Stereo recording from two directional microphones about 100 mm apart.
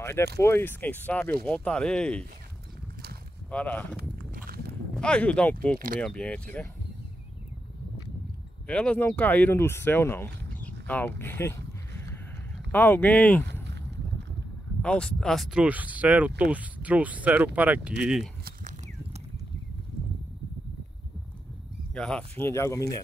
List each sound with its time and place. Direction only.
0.0 s speech: 25° left (ahead or behind); by 2.2 s 10° left (ahead or behind)
3.4 s speech: 15° left (ahead or behind)
4.9 s speech: 10° left (ahead or behind)
8.6 s speech: 10° left (ahead or behind)
14.8 s speech: 10° left (ahead or behind)
15.6 s speech: 15° right (ahead or behind)
21.9 s speech: 5° left (ahead or behind)
22.4 s speech: 30° left (ahead or behind)